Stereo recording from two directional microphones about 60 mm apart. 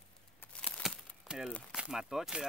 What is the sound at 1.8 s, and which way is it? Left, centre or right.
Speech, centre.